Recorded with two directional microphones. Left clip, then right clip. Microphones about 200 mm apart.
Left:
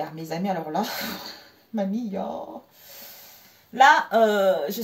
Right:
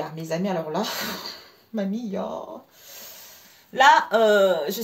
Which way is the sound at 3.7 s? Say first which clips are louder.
Even; 45° right (ahead or behind).